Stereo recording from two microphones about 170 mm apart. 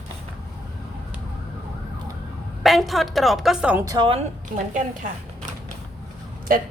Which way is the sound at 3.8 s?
20° right (ahead or behind).